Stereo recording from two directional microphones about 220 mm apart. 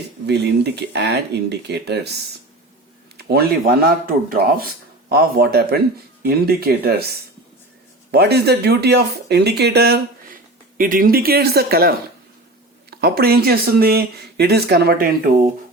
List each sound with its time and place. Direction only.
0.3 s speech: 50° right (ahead or behind)
3.2 s speech: 45° right (ahead or behind)